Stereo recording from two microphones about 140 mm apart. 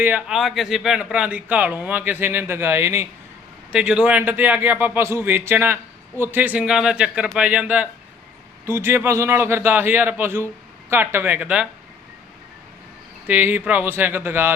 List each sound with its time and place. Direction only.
0.0 s speech: 10° right (ahead or behind)
3.7 s speech: 5° right (ahead or behind)
13.2 s speech: 10° right (ahead or behind)